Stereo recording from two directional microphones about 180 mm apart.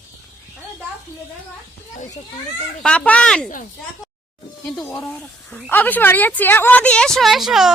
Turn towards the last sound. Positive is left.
turn(degrees=0)  # may be behind; listen again after turning